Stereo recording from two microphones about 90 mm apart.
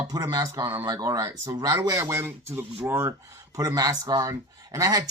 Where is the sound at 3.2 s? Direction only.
40° right (ahead or behind).